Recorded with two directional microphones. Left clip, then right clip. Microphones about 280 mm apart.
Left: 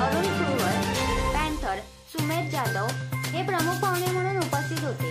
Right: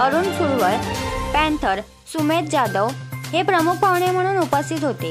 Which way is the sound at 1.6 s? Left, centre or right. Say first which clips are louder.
Right 9 dB; right.